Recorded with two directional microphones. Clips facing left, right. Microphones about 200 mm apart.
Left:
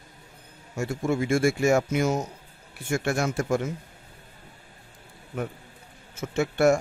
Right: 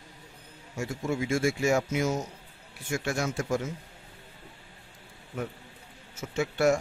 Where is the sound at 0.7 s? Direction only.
50° left (ahead or behind).